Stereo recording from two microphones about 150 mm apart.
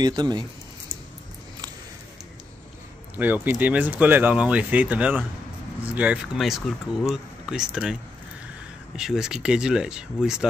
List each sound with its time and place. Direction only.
0.0 s speech: 30° right (ahead or behind)
3.4 s speech: 10° right (ahead or behind)